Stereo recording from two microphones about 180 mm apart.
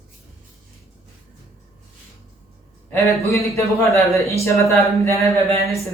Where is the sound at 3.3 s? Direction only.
15° left (ahead or behind).